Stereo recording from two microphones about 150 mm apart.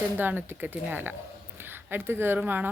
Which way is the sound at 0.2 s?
15° right (ahead or behind).